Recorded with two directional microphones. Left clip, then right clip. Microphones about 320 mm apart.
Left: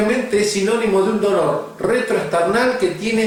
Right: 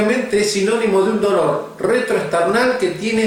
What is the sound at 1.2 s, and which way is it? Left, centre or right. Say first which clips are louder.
Speech: right 1 dB; centre.